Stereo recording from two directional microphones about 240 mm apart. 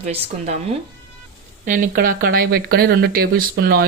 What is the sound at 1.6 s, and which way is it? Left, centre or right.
Speech, right.